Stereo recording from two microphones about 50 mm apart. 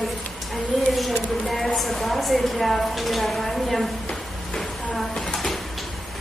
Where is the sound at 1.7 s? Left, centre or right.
Centre.